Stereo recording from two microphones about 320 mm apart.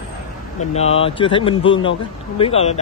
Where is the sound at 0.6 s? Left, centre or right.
Centre.